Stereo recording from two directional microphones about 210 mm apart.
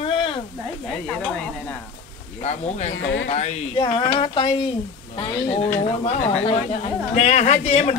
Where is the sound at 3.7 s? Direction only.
20° left (ahead or behind).